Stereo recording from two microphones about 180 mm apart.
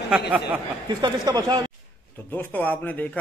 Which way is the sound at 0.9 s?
25° right (ahead or behind).